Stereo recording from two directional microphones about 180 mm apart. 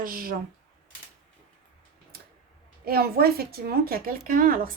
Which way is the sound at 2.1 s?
55° right (ahead or behind).